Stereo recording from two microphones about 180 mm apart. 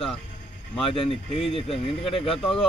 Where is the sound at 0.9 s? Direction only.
30° left (ahead or behind).